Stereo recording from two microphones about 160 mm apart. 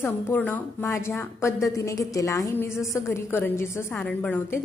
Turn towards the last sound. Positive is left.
turn(degrees=10)  # may be behind; listen again after turning